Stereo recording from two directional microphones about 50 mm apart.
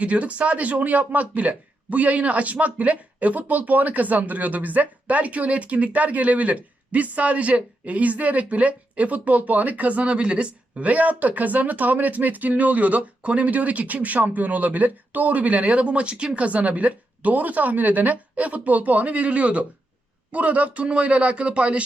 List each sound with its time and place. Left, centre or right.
0.0 s speech: right